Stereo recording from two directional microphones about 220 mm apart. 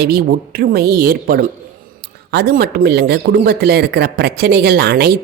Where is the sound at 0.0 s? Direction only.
45° right (ahead or behind).